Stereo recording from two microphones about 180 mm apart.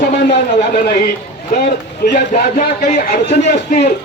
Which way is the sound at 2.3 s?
50° left (ahead or behind).